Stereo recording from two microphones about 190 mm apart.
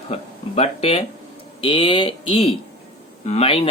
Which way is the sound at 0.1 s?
35° left (ahead or behind).